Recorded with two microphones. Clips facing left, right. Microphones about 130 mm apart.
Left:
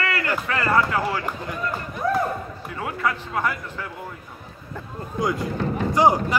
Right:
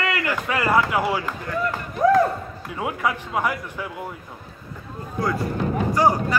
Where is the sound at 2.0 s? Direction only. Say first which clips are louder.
Right 7 dB; 90° right.